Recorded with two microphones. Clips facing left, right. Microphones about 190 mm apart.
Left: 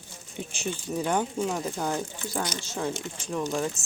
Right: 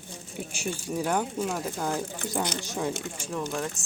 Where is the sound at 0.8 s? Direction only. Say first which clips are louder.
Left 1 dB; 5° right (ahead or behind).